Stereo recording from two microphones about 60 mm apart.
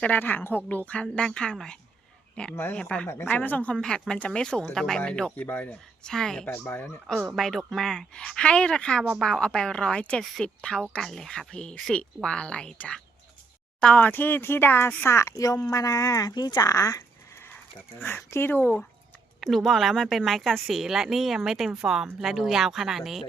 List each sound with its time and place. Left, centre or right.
0.1 s speech: left
1.1 s a man's voice: centre
3.8 s speech: centre
5.4 s speech: left
6.0 s speech: centre
6.5 s speech: left
7.3 s speech: centre; by 14.9 s left
15.0 s speech: left
15.4 s speech: left
18.0 s speech: left
18.4 s speech: left
19.4 s speech: centre